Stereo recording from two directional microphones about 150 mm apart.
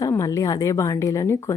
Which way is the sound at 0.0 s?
20° left (ahead or behind).